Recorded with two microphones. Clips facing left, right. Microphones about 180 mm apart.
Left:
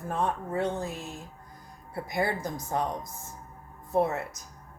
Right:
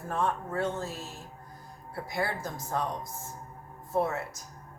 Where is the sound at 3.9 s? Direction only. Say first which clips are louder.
Left 3 dB; 20° left (ahead or behind).